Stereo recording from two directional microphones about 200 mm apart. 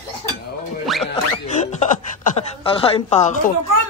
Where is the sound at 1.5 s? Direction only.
35° left (ahead or behind).